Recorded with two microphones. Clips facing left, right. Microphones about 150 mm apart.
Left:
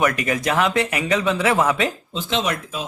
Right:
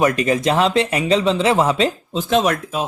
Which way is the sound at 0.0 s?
30° right (ahead or behind).